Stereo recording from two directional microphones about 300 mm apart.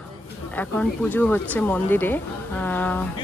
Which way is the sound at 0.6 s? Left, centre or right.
Centre.